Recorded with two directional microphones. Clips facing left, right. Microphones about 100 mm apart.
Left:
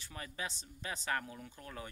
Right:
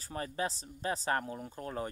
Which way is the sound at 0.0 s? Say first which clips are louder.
Right 8 dB; 35° right (ahead or behind).